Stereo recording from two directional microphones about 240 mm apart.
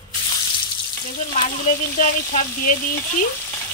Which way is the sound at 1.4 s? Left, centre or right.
Left.